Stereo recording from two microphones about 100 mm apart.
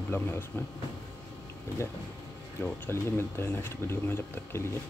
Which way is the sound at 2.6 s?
25° left (ahead or behind).